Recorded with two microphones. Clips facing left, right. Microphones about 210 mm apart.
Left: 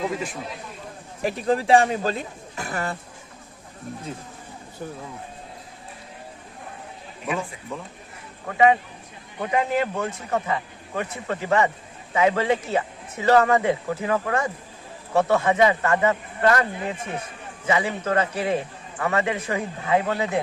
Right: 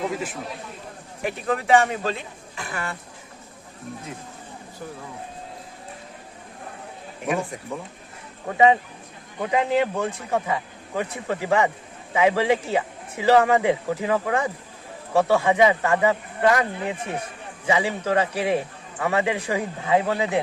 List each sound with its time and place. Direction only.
0.0 s a man's voice: 5° right (ahead or behind)
1.2 s speech: 30° left (ahead or behind)
7.7 s a man's voice: 10° right (ahead or behind)
17.7 s a man's voice: 15° right (ahead or behind)